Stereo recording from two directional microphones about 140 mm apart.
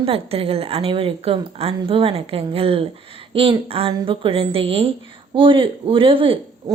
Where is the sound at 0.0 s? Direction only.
45° right (ahead or behind).